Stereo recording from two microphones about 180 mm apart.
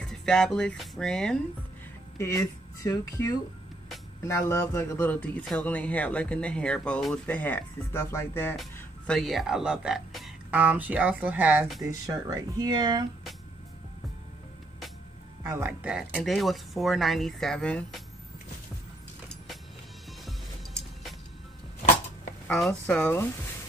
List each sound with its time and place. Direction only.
0.0 s speech: 5° left (ahead or behind)
2.1 s speech: 15° left (ahead or behind); by 11.8 s 5° right (ahead or behind)
11.9 s speech: 20° right (ahead or behind)
15.4 s speech: 10° right (ahead or behind)
22.5 s speech: 5° left (ahead or behind)